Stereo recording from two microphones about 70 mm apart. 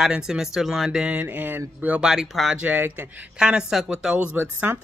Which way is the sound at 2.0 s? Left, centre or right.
Centre.